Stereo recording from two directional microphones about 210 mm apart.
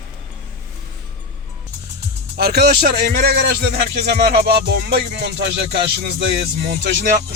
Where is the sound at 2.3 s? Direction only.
50° right (ahead or behind).